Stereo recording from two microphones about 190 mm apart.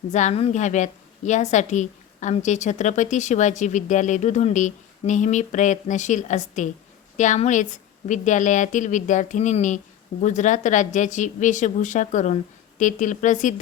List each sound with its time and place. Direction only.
0.1 s a woman's voice: 40° left (ahead or behind)